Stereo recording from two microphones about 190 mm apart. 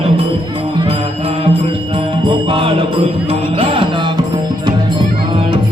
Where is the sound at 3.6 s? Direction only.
25° right (ahead or behind).